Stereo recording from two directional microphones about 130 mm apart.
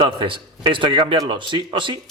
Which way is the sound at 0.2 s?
40° right (ahead or behind).